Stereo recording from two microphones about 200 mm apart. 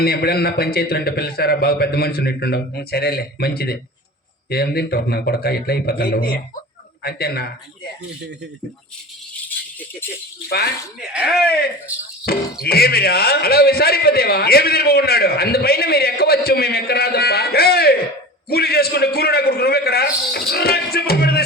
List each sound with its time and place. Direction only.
0.0 s speech: 50° left (ahead or behind)
11.1 s speech: 5° right (ahead or behind)
12.2 s speech: 50° left (ahead or behind)